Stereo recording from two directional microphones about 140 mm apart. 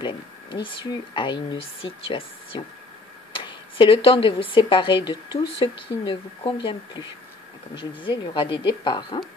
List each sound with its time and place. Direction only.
0.0 s speech: 35° left (ahead or behind)